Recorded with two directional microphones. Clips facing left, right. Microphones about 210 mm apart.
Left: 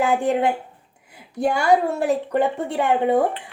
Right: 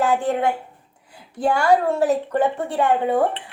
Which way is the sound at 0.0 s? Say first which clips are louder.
Left 1 dB; 15° left (ahead or behind).